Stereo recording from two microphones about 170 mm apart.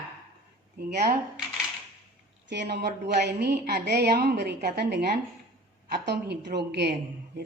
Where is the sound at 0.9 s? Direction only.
70° right (ahead or behind).